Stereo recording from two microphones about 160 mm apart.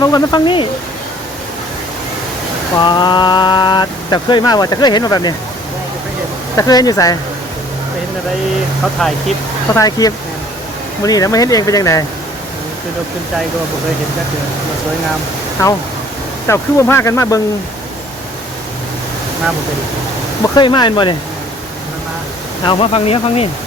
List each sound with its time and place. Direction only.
0.0 s speech: 25° left (ahead or behind)
2.7 s speech: 30° left (ahead or behind)
6.6 s speech: 25° left (ahead or behind)
9.7 s speech: 25° left (ahead or behind)
16.5 s speech: 15° left (ahead or behind)
20.4 s speech: 30° left (ahead or behind)
22.6 s speech: 35° left (ahead or behind)